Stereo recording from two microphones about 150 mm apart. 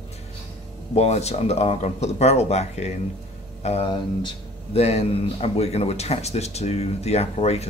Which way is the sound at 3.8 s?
30° left (ahead or behind).